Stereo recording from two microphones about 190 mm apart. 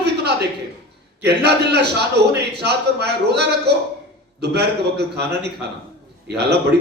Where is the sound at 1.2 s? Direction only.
60° right (ahead or behind).